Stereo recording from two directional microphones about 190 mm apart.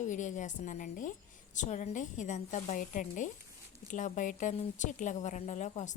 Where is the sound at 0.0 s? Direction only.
40° left (ahead or behind).